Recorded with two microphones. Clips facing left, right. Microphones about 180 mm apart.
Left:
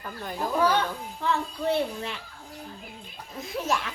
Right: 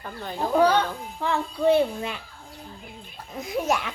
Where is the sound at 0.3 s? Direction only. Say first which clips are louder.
Right 5 dB; 40° right (ahead or behind).